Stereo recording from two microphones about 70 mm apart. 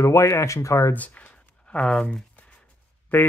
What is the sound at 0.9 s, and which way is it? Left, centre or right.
Speech, left.